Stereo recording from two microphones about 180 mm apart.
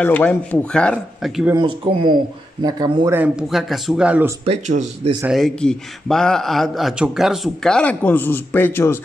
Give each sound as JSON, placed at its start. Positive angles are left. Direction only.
{"t": 0.0, "sound": "speech", "side_deg": 10}
{"t": 1.5, "sound": "speech", "side_deg": -25}
{"t": 3.2, "sound": "a man's voice", "side_deg": -5}
{"t": 4.5, "sound": "speech", "side_deg": -35}
{"t": 5.3, "sound": "a man's voice", "side_deg": 5}